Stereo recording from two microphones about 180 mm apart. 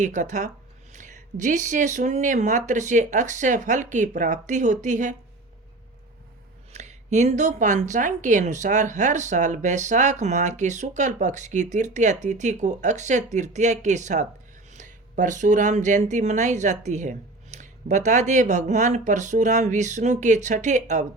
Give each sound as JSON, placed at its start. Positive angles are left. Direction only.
{"t": 0.0, "sound": "speech", "side_deg": -40}
{"t": 6.7, "sound": "a woman's voice", "side_deg": -40}